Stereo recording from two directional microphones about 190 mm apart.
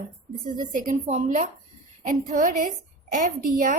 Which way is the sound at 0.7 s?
40° right (ahead or behind).